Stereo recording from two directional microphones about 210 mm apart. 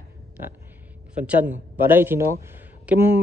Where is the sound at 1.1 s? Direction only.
5° right (ahead or behind).